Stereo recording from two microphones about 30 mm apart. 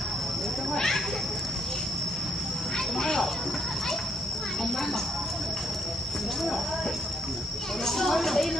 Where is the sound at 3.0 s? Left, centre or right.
Centre.